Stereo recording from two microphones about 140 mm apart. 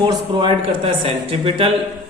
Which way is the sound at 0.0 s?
35° right (ahead or behind).